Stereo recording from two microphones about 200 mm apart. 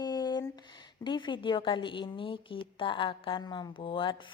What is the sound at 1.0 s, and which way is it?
A woman's voice, 25° left (ahead or behind).